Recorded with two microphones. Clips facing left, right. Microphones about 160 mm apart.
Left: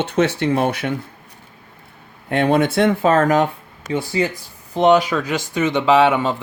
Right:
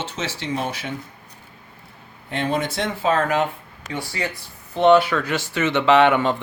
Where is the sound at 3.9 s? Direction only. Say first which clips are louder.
Left 8 dB; 20° left (ahead or behind).